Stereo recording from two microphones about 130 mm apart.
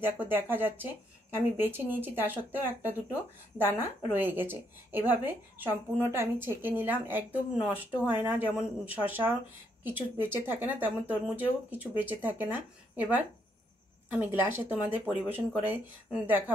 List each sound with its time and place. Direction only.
0.5 s speech: 15° right (ahead or behind)